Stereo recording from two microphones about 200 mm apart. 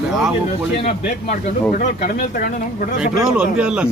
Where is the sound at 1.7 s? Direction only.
45° left (ahead or behind).